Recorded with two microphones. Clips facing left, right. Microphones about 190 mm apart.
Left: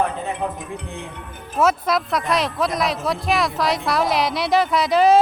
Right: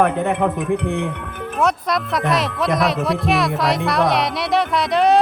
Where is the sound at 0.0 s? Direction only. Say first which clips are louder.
Right 6 dB; 65° right (ahead or behind).